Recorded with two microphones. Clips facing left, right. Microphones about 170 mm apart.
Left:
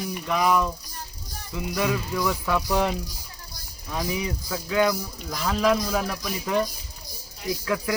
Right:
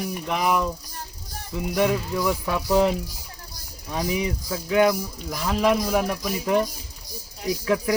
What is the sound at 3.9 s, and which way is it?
A man's voice, 10° right (ahead or behind).